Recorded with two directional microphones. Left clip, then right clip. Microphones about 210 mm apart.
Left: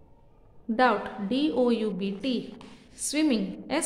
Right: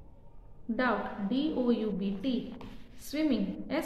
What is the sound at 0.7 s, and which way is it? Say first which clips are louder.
A woman's voice: left 7 dB; 55° left (ahead or behind).